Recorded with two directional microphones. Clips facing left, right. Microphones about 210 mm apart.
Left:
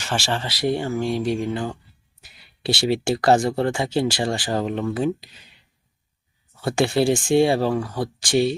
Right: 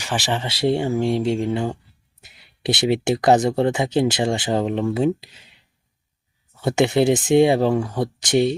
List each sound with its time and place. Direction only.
0.0 s speech: 15° right (ahead or behind)
6.6 s speech: 20° right (ahead or behind)